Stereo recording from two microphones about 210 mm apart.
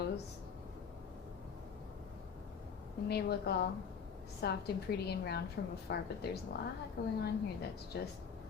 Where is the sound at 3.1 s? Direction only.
50° left (ahead or behind).